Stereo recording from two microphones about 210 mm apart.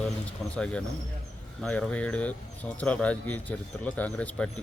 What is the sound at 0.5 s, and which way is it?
Speech, 5° left (ahead or behind).